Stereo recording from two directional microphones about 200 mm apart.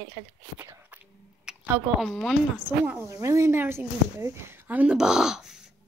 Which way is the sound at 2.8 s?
10° right (ahead or behind).